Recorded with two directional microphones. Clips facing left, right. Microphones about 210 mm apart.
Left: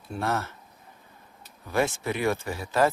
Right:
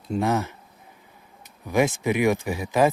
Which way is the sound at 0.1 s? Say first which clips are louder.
Right 6 dB; 15° right (ahead or behind).